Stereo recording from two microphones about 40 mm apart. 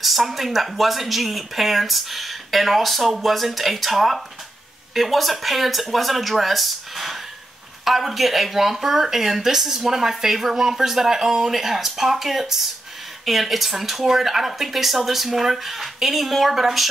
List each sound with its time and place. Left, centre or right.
0.0 s speech: centre